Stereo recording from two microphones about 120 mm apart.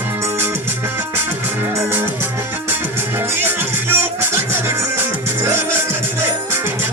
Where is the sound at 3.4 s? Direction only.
15° right (ahead or behind).